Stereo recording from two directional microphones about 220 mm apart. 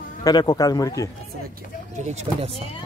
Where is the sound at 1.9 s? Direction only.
30° right (ahead or behind).